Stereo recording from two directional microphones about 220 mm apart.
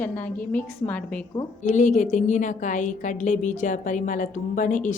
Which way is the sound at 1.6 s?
35° left (ahead or behind).